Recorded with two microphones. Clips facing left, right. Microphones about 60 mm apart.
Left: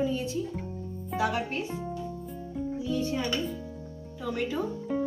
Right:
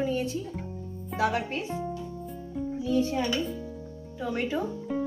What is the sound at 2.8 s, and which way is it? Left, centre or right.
Speech, right.